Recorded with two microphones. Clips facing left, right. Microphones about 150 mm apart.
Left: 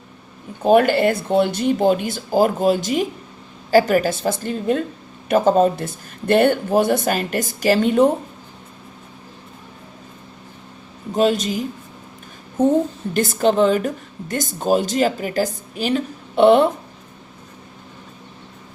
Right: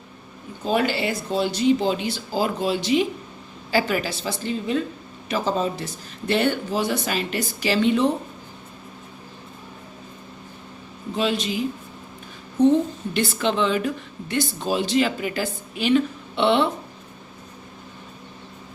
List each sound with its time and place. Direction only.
0.6 s a woman's voice: 55° left (ahead or behind)
11.1 s a woman's voice: 45° left (ahead or behind)